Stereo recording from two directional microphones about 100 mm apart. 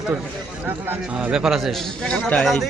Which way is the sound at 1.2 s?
10° right (ahead or behind).